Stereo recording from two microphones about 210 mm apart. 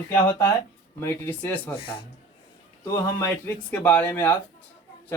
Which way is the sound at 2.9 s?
15° left (ahead or behind).